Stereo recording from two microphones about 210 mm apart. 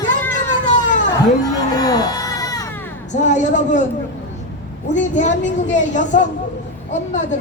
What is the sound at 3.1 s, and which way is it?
Speech, 35° left (ahead or behind).